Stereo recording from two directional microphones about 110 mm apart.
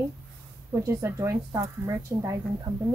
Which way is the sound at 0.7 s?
25° right (ahead or behind).